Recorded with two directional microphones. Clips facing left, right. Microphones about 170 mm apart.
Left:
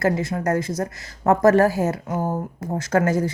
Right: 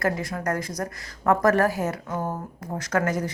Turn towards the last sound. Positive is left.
turn(degrees=30)  # may be behind; listen again after turning